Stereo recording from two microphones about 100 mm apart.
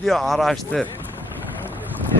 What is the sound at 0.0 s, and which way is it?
Speech, centre (ahead or behind).